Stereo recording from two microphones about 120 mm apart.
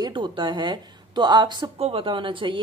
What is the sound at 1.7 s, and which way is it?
Speech, 55° right (ahead or behind).